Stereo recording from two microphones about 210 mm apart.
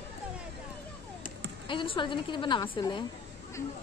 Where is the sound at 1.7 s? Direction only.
25° left (ahead or behind).